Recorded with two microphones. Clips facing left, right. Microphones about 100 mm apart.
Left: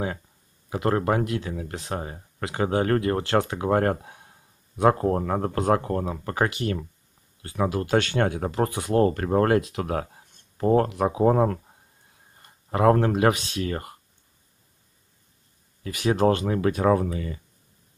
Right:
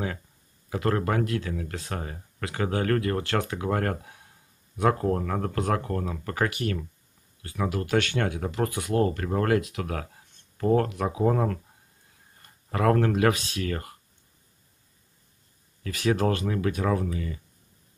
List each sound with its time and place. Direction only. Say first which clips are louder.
0.7 s speech: left 3 dB; 20° left (ahead or behind)
15.8 s speech: left 3 dB; 20° left (ahead or behind); by 17.4 s 35° left (ahead or behind)